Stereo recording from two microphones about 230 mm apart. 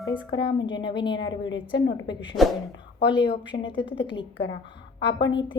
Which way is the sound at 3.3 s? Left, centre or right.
Left.